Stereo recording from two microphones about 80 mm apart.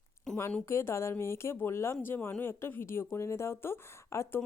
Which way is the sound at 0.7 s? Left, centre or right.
Left.